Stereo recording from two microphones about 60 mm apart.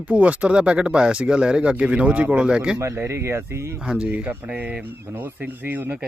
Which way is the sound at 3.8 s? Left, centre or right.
Centre.